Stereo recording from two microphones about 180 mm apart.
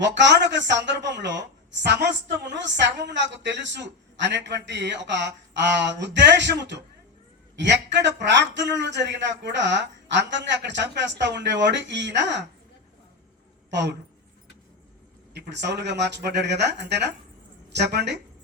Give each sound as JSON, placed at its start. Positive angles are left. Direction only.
{"t": 0.0, "sound": "a man's voice", "side_deg": -80}
{"t": 13.7, "sound": "a woman's voice", "side_deg": -75}
{"t": 15.4, "sound": "a man's voice", "side_deg": -75}